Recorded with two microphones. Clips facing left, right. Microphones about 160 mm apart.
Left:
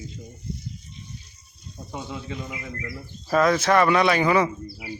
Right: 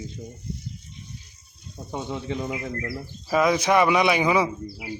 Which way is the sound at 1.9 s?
25° right (ahead or behind).